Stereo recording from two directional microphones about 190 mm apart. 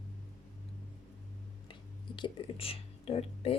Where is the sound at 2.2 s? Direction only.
25° left (ahead or behind).